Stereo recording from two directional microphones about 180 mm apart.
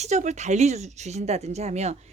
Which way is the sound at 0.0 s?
40° right (ahead or behind).